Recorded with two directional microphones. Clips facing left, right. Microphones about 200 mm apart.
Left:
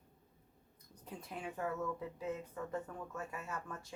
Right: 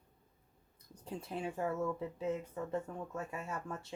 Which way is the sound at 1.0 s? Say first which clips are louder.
Right 5 dB; 30° right (ahead or behind).